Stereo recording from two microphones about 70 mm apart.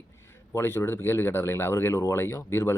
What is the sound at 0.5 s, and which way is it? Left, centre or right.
Speech, left.